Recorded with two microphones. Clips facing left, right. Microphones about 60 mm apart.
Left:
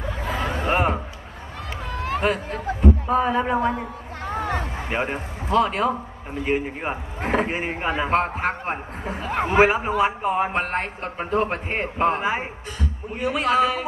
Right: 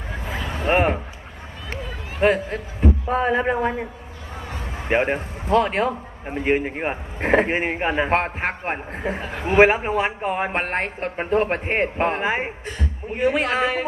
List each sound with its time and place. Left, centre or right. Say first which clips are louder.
0.7 s a sound: right 3 dB; right
1.9 s run: left 5 dB; left
2.4 s a man's voice: even; left
3.1 s a man's voice: even; right
3.8 s a sound: left 3 dB; left
4.8 s a man's voice: right 10 dB; right
9.3 s a man's voice: left 5 dB; left
9.8 s a man's voice: left 1 dB; right